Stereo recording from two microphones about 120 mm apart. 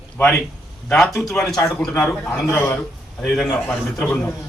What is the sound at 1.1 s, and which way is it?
A man's voice, centre (ahead or behind).